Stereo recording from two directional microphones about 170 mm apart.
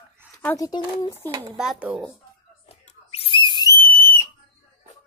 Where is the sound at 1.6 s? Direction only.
5° right (ahead or behind).